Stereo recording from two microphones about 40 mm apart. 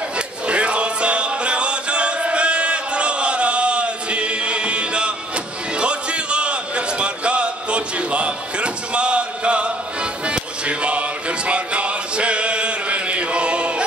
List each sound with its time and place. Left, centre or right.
0.5 s music: right